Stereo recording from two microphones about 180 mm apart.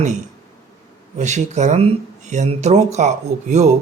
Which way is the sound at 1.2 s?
40° right (ahead or behind).